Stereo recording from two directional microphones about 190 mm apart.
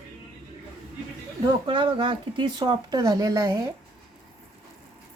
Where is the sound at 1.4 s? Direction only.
25° right (ahead or behind).